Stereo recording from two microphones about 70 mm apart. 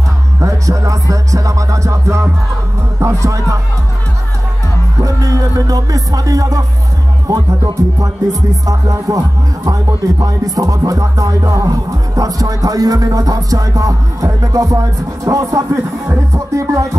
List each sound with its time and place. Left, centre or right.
0.4 s music: right
4.9 s music: right
10.2 s music: right